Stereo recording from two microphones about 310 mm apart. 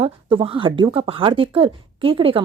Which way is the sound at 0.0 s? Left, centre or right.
Centre.